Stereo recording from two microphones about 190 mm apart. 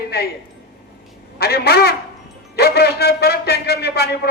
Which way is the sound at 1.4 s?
55° left (ahead or behind).